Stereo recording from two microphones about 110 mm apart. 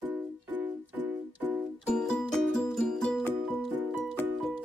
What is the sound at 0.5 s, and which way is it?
Keyboard, 15° right (ahead or behind).